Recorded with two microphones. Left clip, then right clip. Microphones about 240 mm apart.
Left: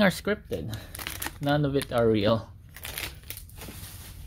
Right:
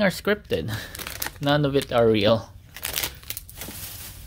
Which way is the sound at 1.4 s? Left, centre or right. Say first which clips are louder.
Right 5 dB; centre.